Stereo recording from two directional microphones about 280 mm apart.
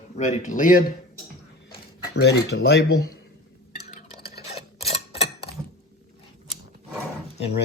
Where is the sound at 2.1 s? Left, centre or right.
Left.